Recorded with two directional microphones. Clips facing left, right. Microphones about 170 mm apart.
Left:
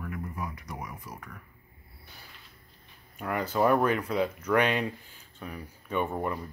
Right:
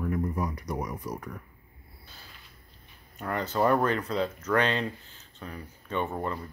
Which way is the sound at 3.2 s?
10° left (ahead or behind).